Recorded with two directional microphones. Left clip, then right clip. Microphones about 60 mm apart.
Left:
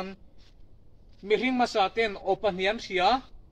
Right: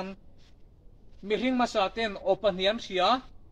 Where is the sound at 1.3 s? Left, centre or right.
Right.